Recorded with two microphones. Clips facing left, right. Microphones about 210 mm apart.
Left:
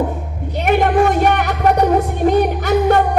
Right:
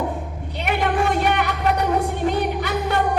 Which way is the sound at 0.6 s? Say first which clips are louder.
Left 7 dB; 45° left (ahead or behind).